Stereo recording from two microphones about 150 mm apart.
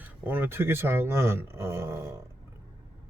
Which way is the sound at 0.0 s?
15° right (ahead or behind).